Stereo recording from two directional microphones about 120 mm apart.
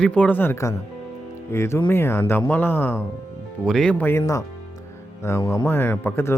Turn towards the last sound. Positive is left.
turn(degrees=20)  # may be behind; listen again after turning